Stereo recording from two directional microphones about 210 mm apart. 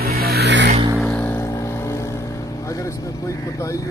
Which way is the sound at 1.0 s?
5° left (ahead or behind).